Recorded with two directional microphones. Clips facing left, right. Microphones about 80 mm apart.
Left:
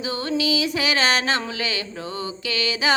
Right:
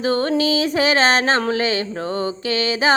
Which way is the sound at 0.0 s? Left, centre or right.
Right.